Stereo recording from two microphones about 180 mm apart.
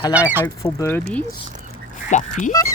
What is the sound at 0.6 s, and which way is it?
Speech, 15° left (ahead or behind).